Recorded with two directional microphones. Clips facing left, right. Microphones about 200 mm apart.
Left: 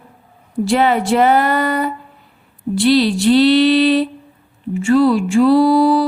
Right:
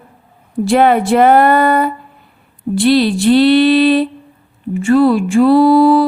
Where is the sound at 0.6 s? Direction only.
55° right (ahead or behind).